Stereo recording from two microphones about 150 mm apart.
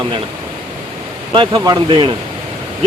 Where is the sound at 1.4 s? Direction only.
25° right (ahead or behind).